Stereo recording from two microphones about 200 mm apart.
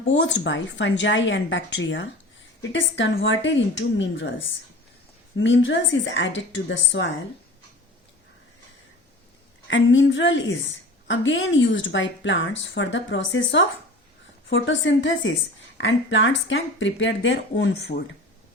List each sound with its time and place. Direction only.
0.0 s a woman's voice: 65° left (ahead or behind)
9.6 s a woman's voice: 65° left (ahead or behind)